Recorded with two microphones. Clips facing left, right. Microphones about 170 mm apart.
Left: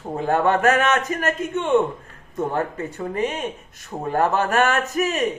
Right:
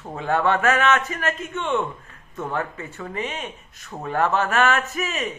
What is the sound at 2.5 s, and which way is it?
A man's voice, 40° left (ahead or behind).